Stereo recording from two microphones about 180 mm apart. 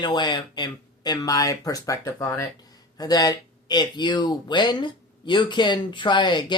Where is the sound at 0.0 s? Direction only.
25° left (ahead or behind).